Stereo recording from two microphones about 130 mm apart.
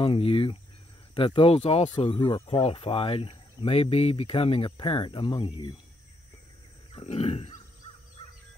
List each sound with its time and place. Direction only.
0.0 s speech: 45° left (ahead or behind)
2.4 s speech: 50° left (ahead or behind)
7.0 s speech: 50° left (ahead or behind)